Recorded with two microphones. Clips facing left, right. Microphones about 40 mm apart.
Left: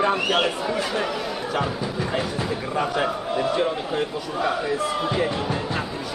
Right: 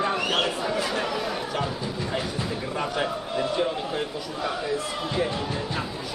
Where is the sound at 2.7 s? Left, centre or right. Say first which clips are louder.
Left 4 dB; centre.